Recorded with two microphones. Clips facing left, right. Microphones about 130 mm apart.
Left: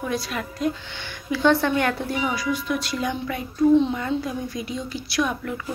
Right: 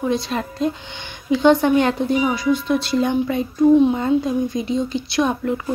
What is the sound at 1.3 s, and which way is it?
Speech, 20° right (ahead or behind).